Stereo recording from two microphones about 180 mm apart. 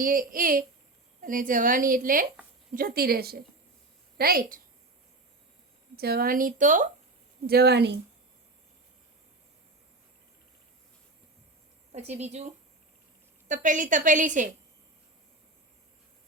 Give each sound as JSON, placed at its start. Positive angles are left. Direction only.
{"t": 0.0, "sound": "a woman's voice", "side_deg": -50}
{"t": 6.0, "sound": "a woman's voice", "side_deg": -55}
{"t": 7.4, "sound": "a woman's voice", "side_deg": -60}
{"t": 11.9, "sound": "a woman's voice", "side_deg": -40}